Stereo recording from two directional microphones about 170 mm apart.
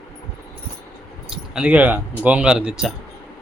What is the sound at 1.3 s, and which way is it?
Speech, 5° right (ahead or behind).